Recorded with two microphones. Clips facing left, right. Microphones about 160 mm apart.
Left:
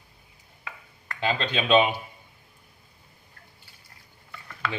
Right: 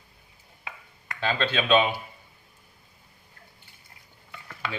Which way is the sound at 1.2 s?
15° left (ahead or behind).